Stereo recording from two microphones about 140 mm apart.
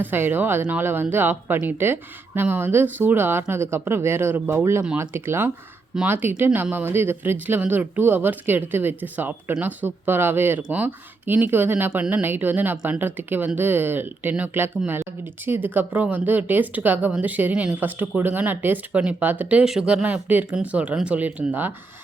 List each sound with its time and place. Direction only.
0.0 s speech: 15° right (ahead or behind)